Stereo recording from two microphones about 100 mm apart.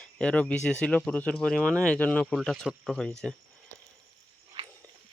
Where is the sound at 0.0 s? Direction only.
10° left (ahead or behind).